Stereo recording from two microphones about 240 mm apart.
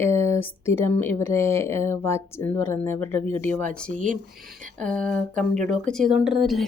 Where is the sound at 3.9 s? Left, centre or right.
Right.